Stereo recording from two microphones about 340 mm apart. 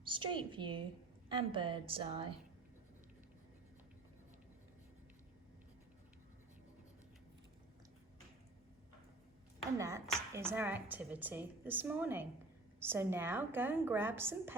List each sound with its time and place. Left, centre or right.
0.0 s a woman's voice: centre
9.7 s a woman's voice: centre